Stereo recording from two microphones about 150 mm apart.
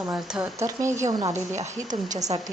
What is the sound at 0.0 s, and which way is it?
Speech, 10° right (ahead or behind).